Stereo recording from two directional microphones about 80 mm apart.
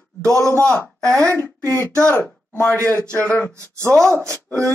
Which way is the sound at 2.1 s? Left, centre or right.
Left.